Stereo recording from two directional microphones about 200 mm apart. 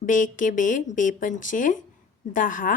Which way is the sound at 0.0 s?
40° left (ahead or behind).